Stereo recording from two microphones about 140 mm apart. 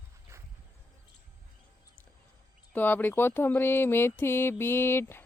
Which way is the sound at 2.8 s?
15° left (ahead or behind).